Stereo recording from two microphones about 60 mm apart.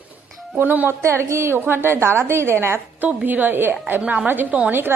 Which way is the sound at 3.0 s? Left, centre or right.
Right.